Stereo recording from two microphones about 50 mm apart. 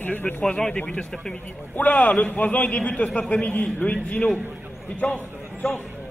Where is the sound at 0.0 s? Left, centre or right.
Left.